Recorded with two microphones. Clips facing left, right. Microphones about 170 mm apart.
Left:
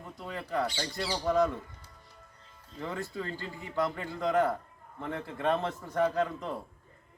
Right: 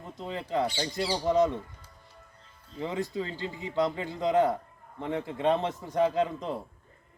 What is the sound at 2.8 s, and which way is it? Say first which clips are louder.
A man's voice: right 4 dB; 20° right (ahead or behind).